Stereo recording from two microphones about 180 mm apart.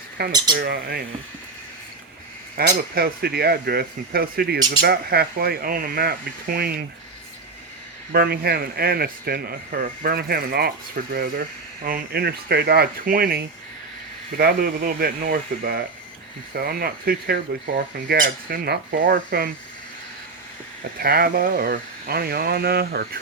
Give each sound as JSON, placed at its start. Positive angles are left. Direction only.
{"t": 0.2, "sound": "speech", "side_deg": -60}
{"t": 2.6, "sound": "speech", "side_deg": -60}
{"t": 8.1, "sound": "speech", "side_deg": -60}
{"t": 21.0, "sound": "speech", "side_deg": -55}